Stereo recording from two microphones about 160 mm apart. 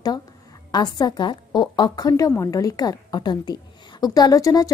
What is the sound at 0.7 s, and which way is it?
A woman's voice, 25° left (ahead or behind).